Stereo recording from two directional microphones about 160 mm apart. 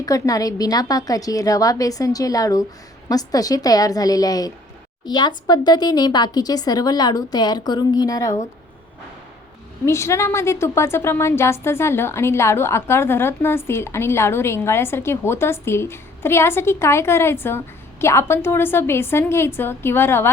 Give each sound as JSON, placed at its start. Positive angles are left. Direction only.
{"t": 0.0, "sound": "speech", "side_deg": 20}
{"t": 9.8, "sound": "a woman's voice", "side_deg": 15}